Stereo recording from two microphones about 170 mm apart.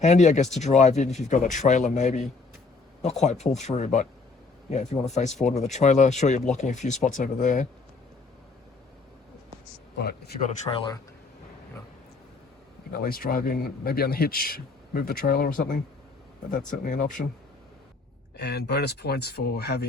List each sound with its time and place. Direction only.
0.0 s speech: 45° left (ahead or behind)
10.0 s speech: 65° left (ahead or behind)
10.6 s speech: 30° left (ahead or behind)
12.9 s a man's voice: 60° left (ahead or behind)
18.3 s speech: 75° left (ahead or behind)